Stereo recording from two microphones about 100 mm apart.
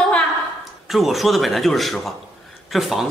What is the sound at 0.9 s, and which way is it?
A woman's voice, centre (ahead or behind).